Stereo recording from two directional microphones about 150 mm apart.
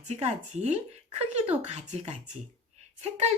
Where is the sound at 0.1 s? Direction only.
50° right (ahead or behind).